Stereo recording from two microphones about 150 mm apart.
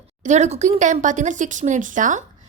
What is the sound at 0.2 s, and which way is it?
Speech, 50° right (ahead or behind).